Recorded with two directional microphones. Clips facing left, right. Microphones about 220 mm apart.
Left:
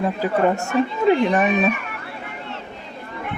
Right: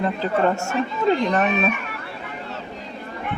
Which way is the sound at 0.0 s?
10° left (ahead or behind).